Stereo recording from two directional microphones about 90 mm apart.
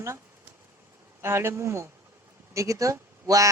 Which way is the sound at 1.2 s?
30° right (ahead or behind).